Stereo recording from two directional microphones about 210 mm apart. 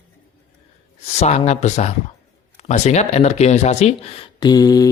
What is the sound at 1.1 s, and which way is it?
Speech, 30° left (ahead or behind).